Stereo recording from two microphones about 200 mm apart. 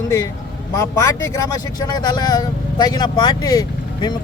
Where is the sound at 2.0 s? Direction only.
20° left (ahead or behind).